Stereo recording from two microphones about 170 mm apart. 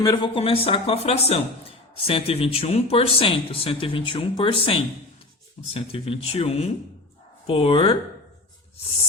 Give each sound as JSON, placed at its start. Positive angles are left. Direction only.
{"t": 0.0, "sound": "speech", "side_deg": 25}